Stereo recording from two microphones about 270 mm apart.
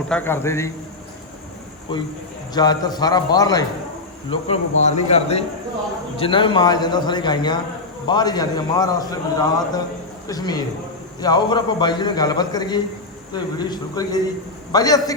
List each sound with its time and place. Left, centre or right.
0.1 s a man's voice: centre
1.9 s a man's voice: centre